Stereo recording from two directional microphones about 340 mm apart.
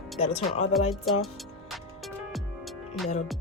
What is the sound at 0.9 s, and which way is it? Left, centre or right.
Speech, centre.